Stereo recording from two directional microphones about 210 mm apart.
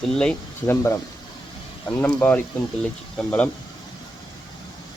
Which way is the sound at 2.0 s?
10° left (ahead or behind).